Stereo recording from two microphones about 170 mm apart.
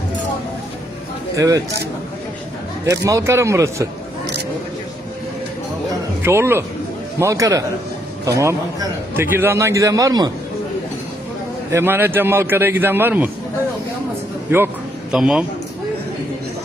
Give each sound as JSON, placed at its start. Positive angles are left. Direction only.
{"t": 1.4, "sound": "a man's voice", "side_deg": -20}
{"t": 2.8, "sound": "a man's voice", "side_deg": -20}
{"t": 6.2, "sound": "a man's voice", "side_deg": -15}
{"t": 11.7, "sound": "a man's voice", "side_deg": -15}
{"t": 14.5, "sound": "a man's voice", "side_deg": -15}
{"t": 15.1, "sound": "a man's voice", "side_deg": -5}